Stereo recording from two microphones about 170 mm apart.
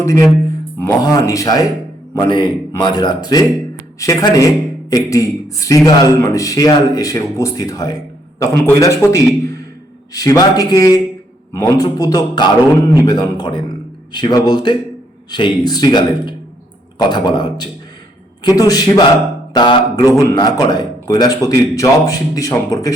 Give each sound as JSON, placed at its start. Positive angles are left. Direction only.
{"t": 0.0, "sound": "a man's voice", "side_deg": 15}
{"t": 20.0, "sound": "a man's voice", "side_deg": 15}